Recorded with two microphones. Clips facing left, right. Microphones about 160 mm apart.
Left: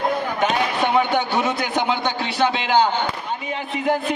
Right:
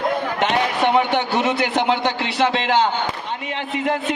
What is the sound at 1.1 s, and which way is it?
A man's voice, 85° right.